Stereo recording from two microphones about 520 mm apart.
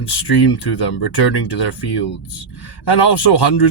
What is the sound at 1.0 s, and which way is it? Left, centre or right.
Speech, left.